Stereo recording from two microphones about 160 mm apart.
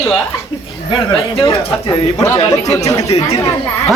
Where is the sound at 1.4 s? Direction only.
20° left (ahead or behind).